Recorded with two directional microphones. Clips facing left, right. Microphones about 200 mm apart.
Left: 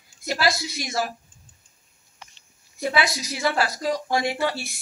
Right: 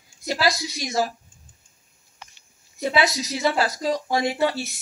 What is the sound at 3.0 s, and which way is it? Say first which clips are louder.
A woman's voice: right 4 dB; 20° right (ahead or behind).